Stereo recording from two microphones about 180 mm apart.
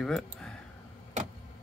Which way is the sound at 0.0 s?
5° left (ahead or behind).